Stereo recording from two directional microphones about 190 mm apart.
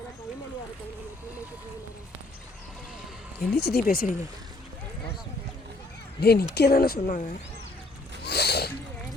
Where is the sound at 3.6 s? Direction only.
55° left (ahead or behind).